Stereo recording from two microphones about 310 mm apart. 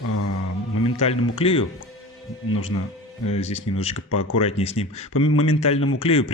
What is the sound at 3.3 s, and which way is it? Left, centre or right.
Speech, centre.